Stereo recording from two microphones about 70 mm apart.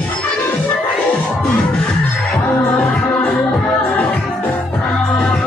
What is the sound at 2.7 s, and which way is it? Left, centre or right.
Music, left.